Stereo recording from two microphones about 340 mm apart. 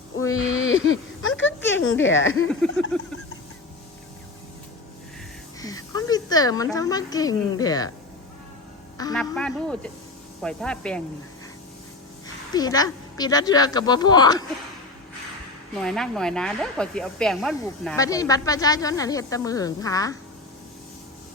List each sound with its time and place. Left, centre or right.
0.3 s speech: left
2.5 s a man's voice: centre
5.5 s a sound: centre
6.7 s speech: centre
9.0 s a man's voice: centre
12.5 s speech: centre
15.7 s speech: centre